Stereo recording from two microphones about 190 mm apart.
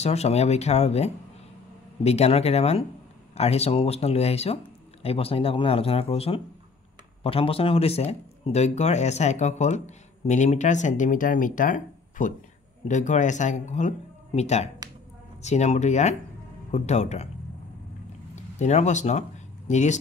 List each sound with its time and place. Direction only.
0.0 s speech: 35° left (ahead or behind)
18.3 s speech: 35° left (ahead or behind)